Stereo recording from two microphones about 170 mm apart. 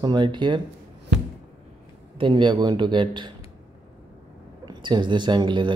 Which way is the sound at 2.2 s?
30° right (ahead or behind).